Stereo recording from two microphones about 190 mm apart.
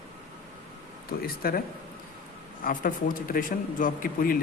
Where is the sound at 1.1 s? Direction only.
50° left (ahead or behind).